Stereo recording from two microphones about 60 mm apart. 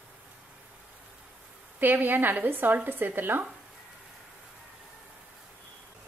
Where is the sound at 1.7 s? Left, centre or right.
Right.